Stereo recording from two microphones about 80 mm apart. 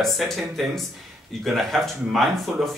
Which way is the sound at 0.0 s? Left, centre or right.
Centre.